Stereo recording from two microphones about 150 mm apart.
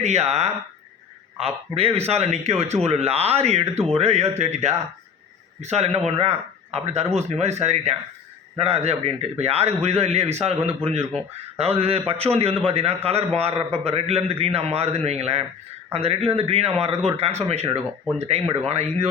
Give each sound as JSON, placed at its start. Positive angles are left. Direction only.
{"t": 0.0, "sound": "a man's voice", "side_deg": -45}